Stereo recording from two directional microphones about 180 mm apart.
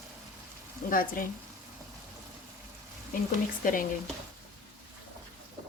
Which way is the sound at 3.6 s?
50° left (ahead or behind).